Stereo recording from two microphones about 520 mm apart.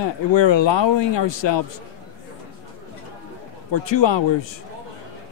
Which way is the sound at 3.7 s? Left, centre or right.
Left.